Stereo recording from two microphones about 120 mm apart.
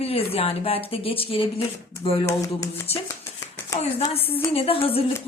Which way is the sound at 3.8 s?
60° left (ahead or behind).